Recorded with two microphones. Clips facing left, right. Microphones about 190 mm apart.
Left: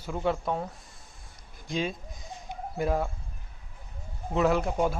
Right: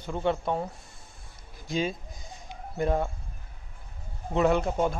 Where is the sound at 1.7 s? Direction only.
Centre (ahead or behind).